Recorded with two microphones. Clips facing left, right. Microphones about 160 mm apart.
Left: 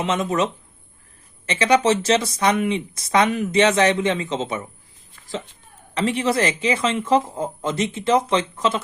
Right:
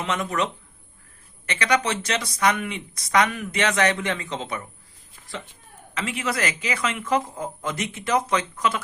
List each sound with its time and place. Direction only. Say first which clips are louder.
0.0 s speech: left 4 dB; 20° left (ahead or behind)
5.9 s speech: left 7 dB; 35° left (ahead or behind)